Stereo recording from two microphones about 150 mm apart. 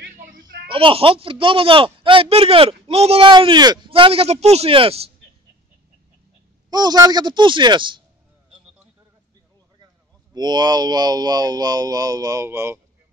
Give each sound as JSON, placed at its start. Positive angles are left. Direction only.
{"t": 0.0, "sound": "a sound", "side_deg": -90}
{"t": 0.7, "sound": "speech", "side_deg": -35}
{"t": 6.7, "sound": "speech", "side_deg": -25}
{"t": 10.3, "sound": "speech", "side_deg": -25}